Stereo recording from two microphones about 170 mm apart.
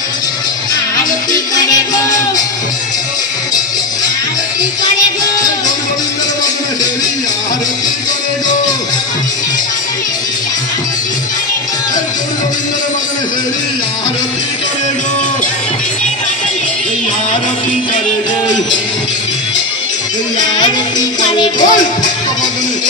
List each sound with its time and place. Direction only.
0.9 s music: 20° left (ahead or behind)
21.3 s music: 25° left (ahead or behind)